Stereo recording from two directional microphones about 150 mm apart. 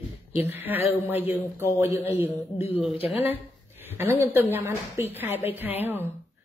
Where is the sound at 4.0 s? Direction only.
15° right (ahead or behind).